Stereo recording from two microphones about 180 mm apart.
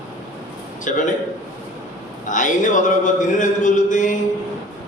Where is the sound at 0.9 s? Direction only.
45° left (ahead or behind).